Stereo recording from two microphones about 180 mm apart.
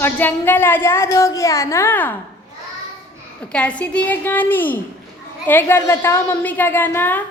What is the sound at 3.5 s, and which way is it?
A woman's voice, 5° left (ahead or behind).